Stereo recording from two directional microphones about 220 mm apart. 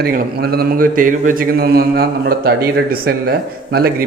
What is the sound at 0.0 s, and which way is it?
A man's voice, 45° right (ahead or behind).